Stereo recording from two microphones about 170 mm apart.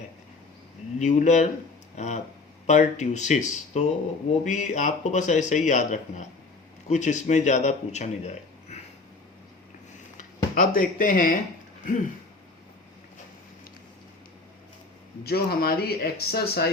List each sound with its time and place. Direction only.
0.9 s a man's voice: 45° left (ahead or behind)
10.5 s a man's voice: 55° left (ahead or behind)
15.2 s speech: 65° left (ahead or behind)